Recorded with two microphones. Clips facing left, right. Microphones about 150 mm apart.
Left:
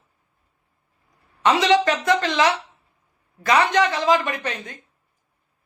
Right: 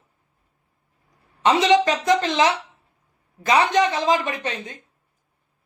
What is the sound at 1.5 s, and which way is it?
Speech, 20° right (ahead or behind).